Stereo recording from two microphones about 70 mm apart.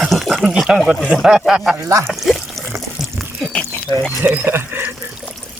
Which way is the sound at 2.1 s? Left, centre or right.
Centre.